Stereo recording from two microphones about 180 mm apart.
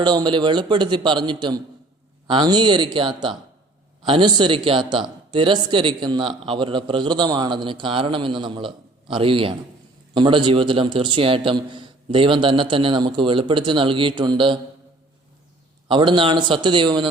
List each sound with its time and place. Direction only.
0.0 s a man's voice: 25° right (ahead or behind)
15.9 s a man's voice: 25° right (ahead or behind)